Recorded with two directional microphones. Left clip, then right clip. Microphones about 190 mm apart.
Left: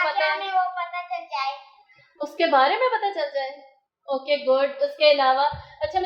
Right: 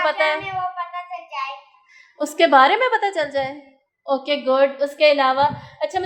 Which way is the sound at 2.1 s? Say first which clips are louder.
Right 6 dB; 55° right (ahead or behind).